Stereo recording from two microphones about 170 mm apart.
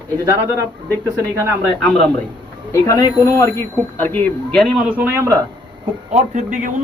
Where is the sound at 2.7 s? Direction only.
20° left (ahead or behind); by 5.4 s 15° right (ahead or behind).